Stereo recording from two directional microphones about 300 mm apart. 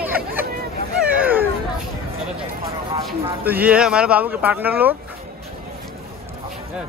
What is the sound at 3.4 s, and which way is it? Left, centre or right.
Speech, centre.